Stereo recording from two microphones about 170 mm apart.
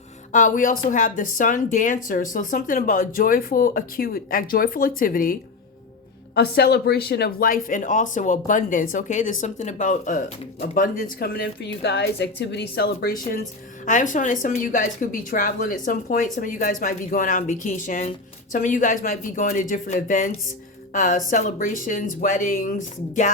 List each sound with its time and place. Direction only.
0.3 s speech: 50° left (ahead or behind)
6.3 s speech: 70° left (ahead or behind); by 23.3 s 50° left (ahead or behind)